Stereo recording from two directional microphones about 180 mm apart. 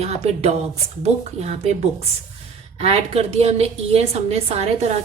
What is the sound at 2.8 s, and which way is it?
A woman's voice, 35° right (ahead or behind).